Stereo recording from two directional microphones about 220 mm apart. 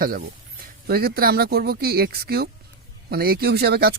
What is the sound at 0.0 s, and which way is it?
Speech, 40° right (ahead or behind).